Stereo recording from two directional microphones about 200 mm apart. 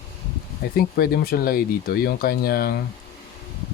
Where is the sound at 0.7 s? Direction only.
50° left (ahead or behind).